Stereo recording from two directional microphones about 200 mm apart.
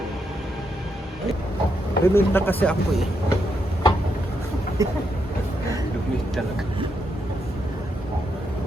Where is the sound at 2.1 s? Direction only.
10° left (ahead or behind).